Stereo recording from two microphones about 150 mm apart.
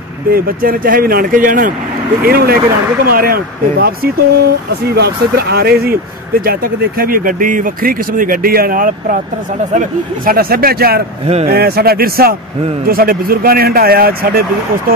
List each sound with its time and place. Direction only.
0.3 s speech: 70° right (ahead or behind)
2.2 s speech: 90° right